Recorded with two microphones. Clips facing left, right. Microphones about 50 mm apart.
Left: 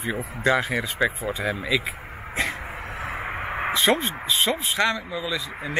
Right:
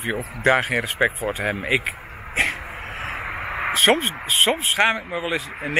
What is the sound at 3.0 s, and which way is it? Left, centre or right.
Vehicle, right.